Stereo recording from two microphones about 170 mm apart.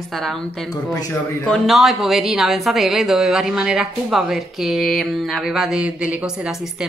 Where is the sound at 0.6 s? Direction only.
25° left (ahead or behind).